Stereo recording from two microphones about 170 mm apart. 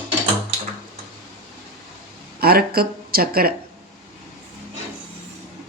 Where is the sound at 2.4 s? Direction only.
65° right (ahead or behind).